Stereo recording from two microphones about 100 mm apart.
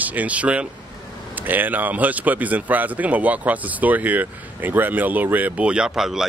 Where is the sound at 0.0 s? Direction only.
15° right (ahead or behind).